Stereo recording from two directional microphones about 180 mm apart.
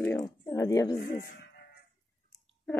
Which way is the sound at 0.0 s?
15° left (ahead or behind).